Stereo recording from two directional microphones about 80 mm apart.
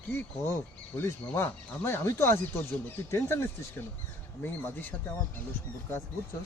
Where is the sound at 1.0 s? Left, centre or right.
Left.